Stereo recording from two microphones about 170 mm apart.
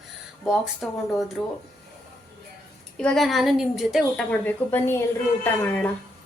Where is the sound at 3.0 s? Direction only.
5° left (ahead or behind).